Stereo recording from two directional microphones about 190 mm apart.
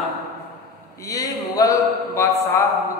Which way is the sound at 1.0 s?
20° left (ahead or behind).